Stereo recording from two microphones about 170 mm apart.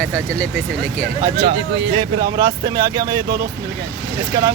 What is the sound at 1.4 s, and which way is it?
Speech, 90° right.